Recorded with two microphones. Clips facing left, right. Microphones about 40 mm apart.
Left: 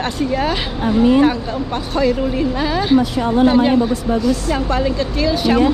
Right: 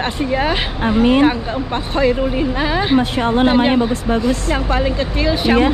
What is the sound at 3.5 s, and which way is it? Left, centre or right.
Speech, right.